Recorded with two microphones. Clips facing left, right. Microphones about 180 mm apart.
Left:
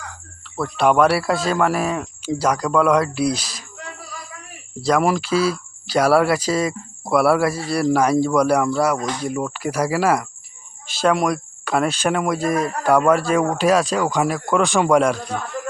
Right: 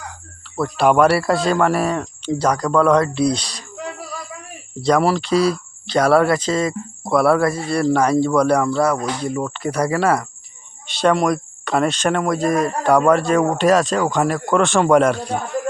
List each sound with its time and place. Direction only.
0.5 s speech: centre (ahead or behind)
4.8 s speech: 5° left (ahead or behind)